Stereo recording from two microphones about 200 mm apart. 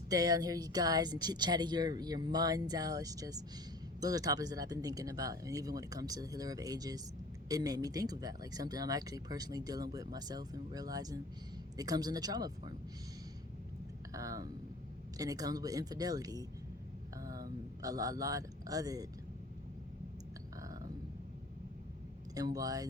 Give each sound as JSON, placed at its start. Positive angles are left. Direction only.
{"t": 0.1, "sound": "speech", "side_deg": -20}
{"t": 14.1, "sound": "speech", "side_deg": -15}
{"t": 20.6, "sound": "a sound", "side_deg": -15}
{"t": 22.4, "sound": "speech", "side_deg": -15}